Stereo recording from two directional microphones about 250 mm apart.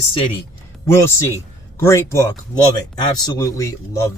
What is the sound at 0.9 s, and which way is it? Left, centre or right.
A man's voice, centre.